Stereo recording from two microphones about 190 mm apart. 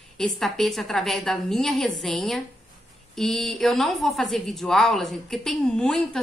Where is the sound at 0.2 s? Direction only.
Centre (ahead or behind).